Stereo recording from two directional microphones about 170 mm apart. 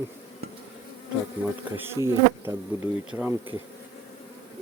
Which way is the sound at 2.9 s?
10° right (ahead or behind).